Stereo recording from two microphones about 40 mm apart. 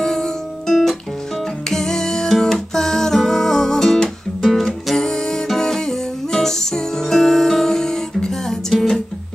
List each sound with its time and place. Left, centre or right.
0.0 s music: centre